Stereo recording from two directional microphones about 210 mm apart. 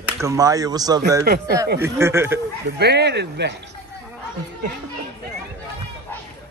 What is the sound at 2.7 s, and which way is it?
Speech, 50° right (ahead or behind).